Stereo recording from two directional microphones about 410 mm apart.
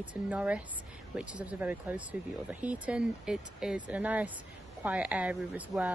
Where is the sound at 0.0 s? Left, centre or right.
Centre.